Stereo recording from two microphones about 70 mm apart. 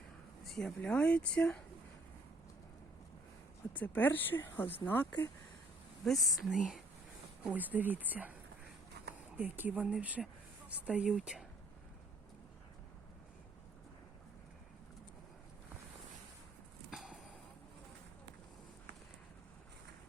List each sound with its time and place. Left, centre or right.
0.4 s a sound: centre
0.8 s speech: centre
3.7 s speech: left
6.1 s speech: centre
7.4 s speech: right
9.6 s speech: right
11.2 s speech: centre
16.9 s a sound: centre